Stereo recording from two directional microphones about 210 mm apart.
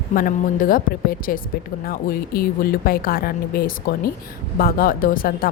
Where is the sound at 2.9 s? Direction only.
45° left (ahead or behind).